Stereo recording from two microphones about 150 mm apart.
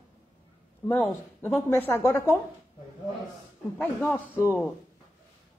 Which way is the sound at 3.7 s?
10° left (ahead or behind).